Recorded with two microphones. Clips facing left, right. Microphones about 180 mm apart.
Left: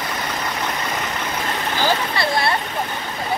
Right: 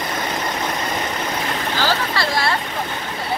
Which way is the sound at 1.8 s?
20° left (ahead or behind).